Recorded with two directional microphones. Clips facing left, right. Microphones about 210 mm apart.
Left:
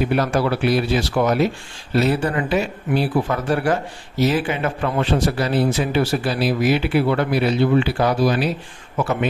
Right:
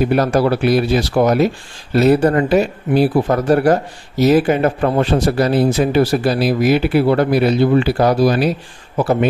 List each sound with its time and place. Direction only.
0.0 s speech: 40° right (ahead or behind)